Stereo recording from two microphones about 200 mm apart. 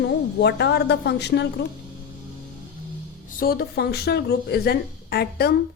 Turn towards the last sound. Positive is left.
turn(degrees=50)  # may be behind; listen again after turning